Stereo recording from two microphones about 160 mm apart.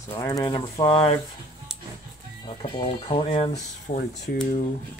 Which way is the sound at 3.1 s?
40° left (ahead or behind).